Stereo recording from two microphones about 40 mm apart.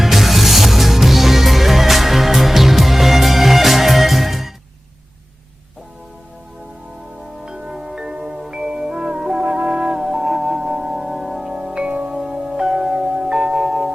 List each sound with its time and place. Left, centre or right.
0.0 s music: centre
7.4 s music: centre
11.5 s music: right
11.9 s music: right
12.1 s music: centre
12.6 s tubular bells: centre
13.7 s singing bowl: centre